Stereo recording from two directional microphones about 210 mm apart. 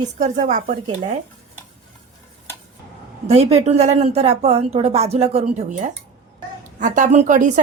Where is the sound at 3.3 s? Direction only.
30° right (ahead or behind).